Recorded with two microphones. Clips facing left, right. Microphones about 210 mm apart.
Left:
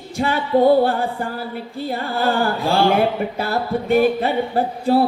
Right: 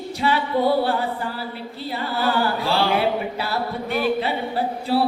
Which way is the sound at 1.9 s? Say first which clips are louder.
Left 3 dB; 45° left (ahead or behind).